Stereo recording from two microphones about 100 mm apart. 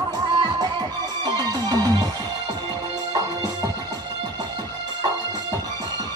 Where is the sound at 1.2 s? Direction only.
45° right (ahead or behind).